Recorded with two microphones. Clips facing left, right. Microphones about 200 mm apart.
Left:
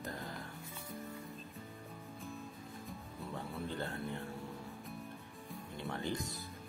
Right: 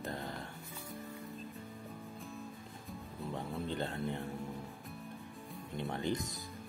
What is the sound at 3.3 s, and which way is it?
Music, 20° right (ahead or behind).